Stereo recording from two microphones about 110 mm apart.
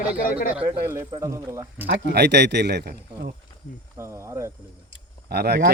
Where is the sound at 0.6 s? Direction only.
25° right (ahead or behind).